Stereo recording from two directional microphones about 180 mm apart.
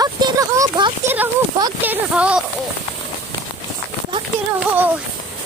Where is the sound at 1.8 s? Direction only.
10° right (ahead or behind).